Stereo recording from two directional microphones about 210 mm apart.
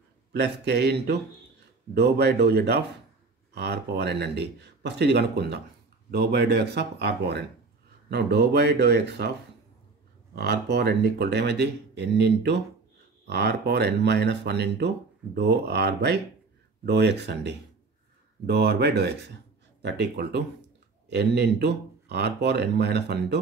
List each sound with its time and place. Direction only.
0.3 s speech: 55° right (ahead or behind)
10.3 s speech: 50° right (ahead or behind)